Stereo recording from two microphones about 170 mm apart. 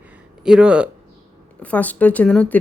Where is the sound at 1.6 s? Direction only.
10° left (ahead or behind).